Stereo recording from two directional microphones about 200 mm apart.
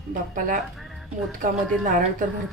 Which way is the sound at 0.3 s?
40° right (ahead or behind).